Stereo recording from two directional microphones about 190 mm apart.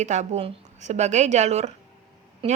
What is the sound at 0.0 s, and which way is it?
Speech, 40° right (ahead or behind).